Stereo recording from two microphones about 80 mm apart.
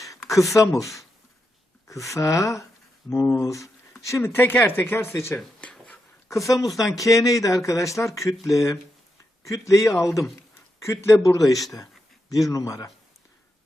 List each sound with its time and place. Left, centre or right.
0.3 s a man's voice: left
2.1 s a man's voice: left